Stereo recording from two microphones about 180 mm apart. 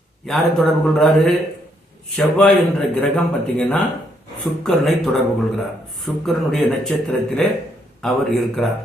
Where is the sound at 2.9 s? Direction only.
5° left (ahead or behind).